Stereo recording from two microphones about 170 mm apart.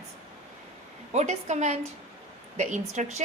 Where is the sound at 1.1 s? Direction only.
40° right (ahead or behind).